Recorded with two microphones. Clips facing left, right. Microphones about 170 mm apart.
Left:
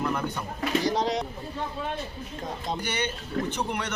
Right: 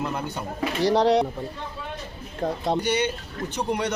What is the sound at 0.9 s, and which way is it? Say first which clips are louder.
Speech: right 7 dB; 65° right (ahead or behind).